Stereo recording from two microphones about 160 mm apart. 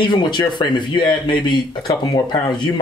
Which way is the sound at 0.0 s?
30° left (ahead or behind).